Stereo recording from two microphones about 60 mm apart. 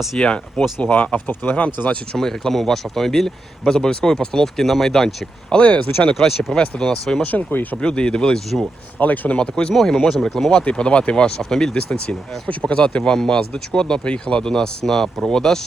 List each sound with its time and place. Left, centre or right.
0.2 s speech: centre
2.1 s speech: centre
6.1 s speech: centre
7.2 s speech: left
7.8 s speech: centre
9.0 s speech: left
9.7 s speech: centre